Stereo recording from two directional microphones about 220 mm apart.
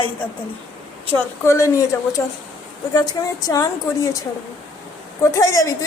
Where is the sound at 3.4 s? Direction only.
15° left (ahead or behind).